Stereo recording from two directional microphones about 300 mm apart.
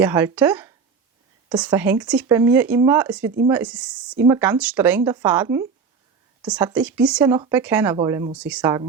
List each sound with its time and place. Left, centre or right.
0.0 s a woman's voice: centre